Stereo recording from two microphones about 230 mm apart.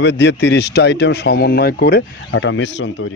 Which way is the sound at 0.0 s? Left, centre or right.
Left.